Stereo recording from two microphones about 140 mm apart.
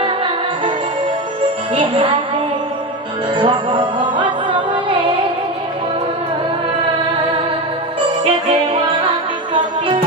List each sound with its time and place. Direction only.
1.8 s music: 35° right (ahead or behind)
3.3 s music: 35° right (ahead or behind)